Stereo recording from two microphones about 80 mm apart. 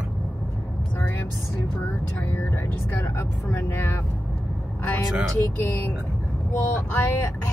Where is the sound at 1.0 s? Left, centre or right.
Left.